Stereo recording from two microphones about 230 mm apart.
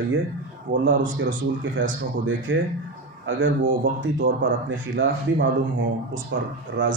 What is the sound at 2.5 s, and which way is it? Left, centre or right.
Speech, right.